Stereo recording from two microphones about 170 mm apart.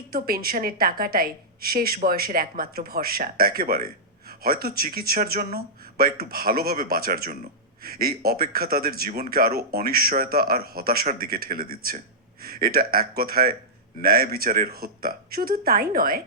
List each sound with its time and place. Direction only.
0.1 s a woman's voice: 60° right (ahead or behind)